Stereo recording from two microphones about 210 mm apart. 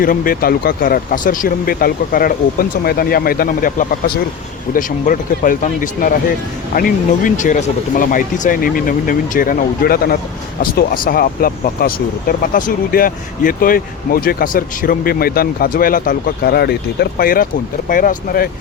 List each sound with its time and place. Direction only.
0.0 s speech: 45° left (ahead or behind)